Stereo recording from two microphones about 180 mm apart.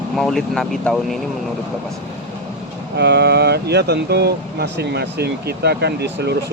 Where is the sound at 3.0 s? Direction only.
70° right (ahead or behind).